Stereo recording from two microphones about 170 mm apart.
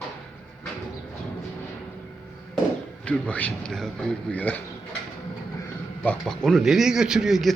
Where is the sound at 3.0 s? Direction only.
5° left (ahead or behind).